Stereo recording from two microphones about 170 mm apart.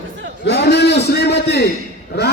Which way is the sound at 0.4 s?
80° left.